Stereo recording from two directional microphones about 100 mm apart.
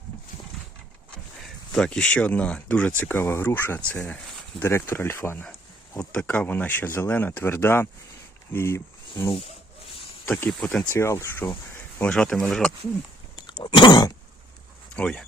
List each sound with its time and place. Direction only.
1.7 s speech: 5° left (ahead or behind)
4.6 s speech: 25° left (ahead or behind)
10.2 s speech: 15° left (ahead or behind)
10.8 s speech: 25° left (ahead or behind)
11.9 s speech: 10° left (ahead or behind)
13.3 s a sound: 50° left (ahead or behind)
14.9 s speech: 10° left (ahead or behind)